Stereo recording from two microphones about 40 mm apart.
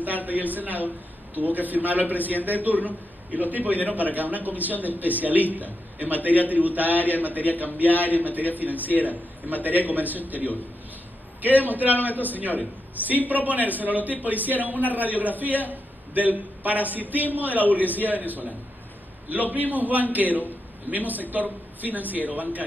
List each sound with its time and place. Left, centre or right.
0.0 s a sound: right
0.5 s a man's voice: right
11.4 s a man's voice: right
19.7 s a man's voice: right